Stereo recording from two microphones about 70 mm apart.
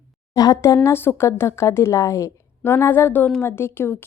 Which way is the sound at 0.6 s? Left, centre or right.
Left.